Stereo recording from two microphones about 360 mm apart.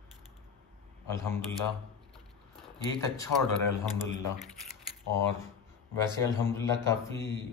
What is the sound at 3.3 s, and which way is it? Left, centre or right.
Speech, left.